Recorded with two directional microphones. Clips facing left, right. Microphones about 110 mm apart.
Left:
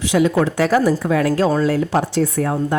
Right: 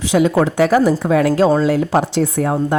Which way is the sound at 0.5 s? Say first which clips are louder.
Right 3 dB; 15° right (ahead or behind).